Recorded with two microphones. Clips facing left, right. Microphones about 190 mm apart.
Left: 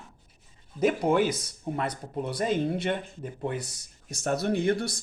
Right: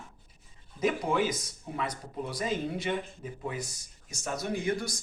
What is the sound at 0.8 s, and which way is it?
Speech, 65° left (ahead or behind).